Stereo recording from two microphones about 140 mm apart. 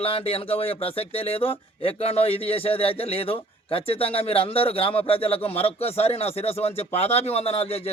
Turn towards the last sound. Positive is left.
turn(degrees=45)  # may be behind; listen again after turning